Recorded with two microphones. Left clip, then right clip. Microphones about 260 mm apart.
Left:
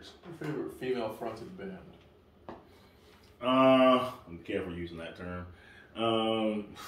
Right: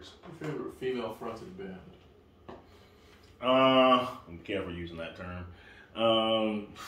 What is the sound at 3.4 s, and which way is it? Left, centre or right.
Speech, centre.